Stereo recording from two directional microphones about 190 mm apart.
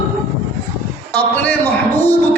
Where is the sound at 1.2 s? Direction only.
10° left (ahead or behind).